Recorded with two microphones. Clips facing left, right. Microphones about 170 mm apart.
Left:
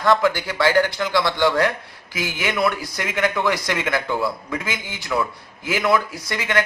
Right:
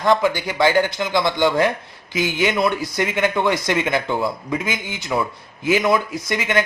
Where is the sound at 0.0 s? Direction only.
20° right (ahead or behind).